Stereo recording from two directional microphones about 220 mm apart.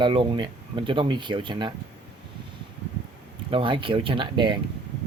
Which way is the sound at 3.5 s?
25° right (ahead or behind).